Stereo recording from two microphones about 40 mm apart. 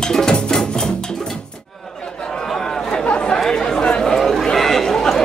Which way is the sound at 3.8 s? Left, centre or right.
Left.